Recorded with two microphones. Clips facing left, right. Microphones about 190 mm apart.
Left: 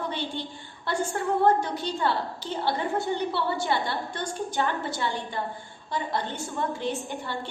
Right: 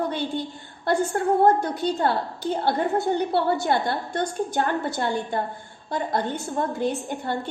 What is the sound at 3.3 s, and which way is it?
A woman's voice, 50° right (ahead or behind).